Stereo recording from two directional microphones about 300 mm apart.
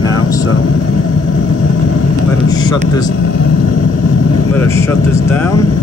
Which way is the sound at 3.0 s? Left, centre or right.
Left.